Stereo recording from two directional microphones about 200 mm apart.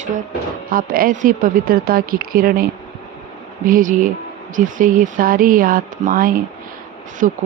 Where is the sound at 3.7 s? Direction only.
40° right (ahead or behind).